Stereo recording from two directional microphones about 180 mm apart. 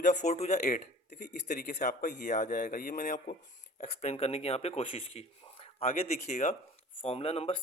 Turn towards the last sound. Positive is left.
turn(degrees=30)  # may be behind; listen again after turning